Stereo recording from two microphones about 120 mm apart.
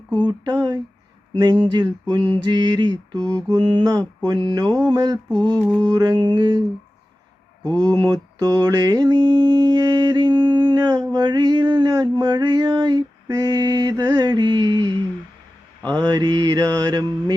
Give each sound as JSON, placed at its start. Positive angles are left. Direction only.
{"t": 0.3, "sound": "mantra", "side_deg": -35}
{"t": 7.6, "sound": "mantra", "side_deg": -35}